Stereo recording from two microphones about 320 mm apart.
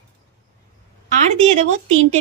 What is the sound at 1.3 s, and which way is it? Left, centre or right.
Speech, right.